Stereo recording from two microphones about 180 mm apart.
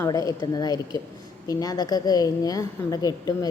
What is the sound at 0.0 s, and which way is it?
A woman's voice, 20° left (ahead or behind).